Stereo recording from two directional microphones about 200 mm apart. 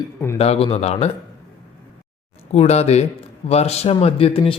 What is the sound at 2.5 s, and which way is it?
A man's voice, 35° left (ahead or behind).